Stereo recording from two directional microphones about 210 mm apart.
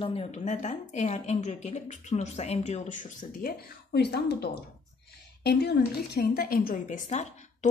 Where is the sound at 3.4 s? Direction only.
50° left (ahead or behind).